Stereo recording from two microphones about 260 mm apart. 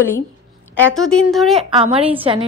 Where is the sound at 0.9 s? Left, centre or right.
Centre.